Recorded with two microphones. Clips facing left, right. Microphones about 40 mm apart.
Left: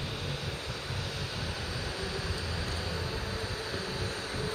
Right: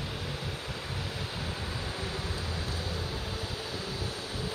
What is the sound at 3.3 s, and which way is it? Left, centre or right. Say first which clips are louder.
Mechanical fan: left 1 dB; left.